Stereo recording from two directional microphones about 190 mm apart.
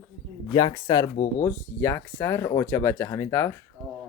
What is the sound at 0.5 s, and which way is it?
Speech, 20° left (ahead or behind).